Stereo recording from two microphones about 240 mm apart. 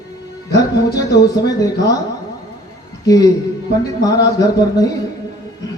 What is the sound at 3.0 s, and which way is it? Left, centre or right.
Speech, centre.